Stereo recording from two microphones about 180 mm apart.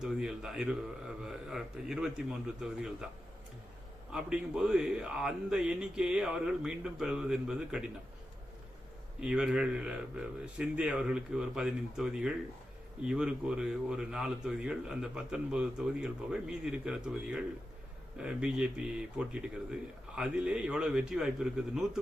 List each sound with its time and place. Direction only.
0.0 s speech: 5° right (ahead or behind)
4.1 s speech: 5° right (ahead or behind)
9.2 s speech: 5° right (ahead or behind)